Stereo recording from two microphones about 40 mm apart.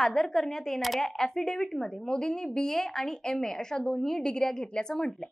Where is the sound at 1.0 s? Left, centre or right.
Centre.